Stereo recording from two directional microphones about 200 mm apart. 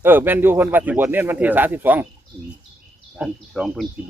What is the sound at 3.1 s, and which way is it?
Speech, 5° right (ahead or behind).